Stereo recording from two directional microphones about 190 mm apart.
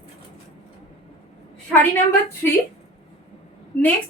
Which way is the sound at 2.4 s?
10° left (ahead or behind).